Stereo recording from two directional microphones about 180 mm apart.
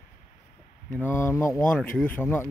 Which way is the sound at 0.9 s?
10° left (ahead or behind).